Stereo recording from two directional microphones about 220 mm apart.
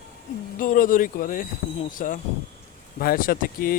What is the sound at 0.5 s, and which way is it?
Speech, 40° left (ahead or behind).